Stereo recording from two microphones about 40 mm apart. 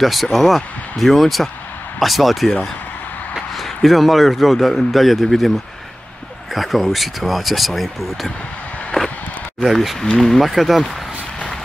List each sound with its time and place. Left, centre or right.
0.0 s a man's voice: centre
3.5 s a man's voice: centre
6.5 s a man's voice: centre
8.9 s a sound: centre
10.1 s a man's voice: centre